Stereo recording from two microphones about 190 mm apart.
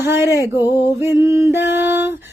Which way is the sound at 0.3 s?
15° left (ahead or behind).